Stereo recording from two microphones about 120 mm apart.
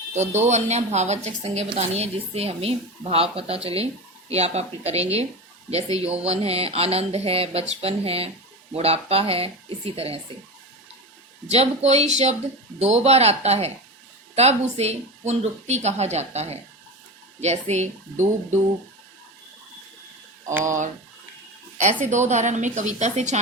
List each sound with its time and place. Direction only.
0.1 s speech: 70° right (ahead or behind); by 10.2 s 55° right (ahead or behind)
11.4 s a woman's voice: 60° right (ahead or behind)
20.7 s speech: 90° right
22.0 s a woman's voice: 85° right